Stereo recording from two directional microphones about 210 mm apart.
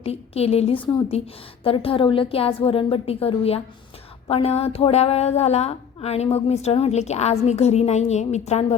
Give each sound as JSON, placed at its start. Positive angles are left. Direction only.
{"t": 0.0, "sound": "a woman's voice", "side_deg": 30}